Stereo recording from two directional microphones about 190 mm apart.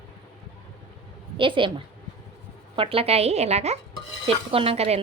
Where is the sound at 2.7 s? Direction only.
30° right (ahead or behind).